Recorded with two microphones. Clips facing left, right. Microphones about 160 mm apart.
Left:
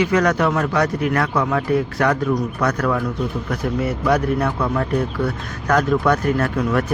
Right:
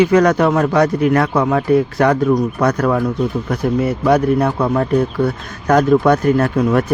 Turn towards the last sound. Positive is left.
turn(degrees=-30)  # may be behind; listen again after turning